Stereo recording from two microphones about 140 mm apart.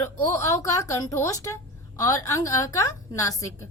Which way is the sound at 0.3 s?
20° left (ahead or behind).